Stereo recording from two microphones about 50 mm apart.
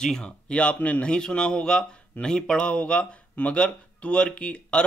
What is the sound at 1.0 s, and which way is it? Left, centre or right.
Speech, centre.